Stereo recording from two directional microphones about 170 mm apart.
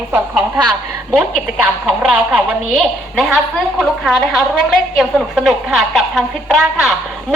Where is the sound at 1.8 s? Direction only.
10° right (ahead or behind).